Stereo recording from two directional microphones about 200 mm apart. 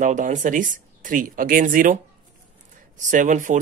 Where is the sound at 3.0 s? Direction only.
40° right (ahead or behind).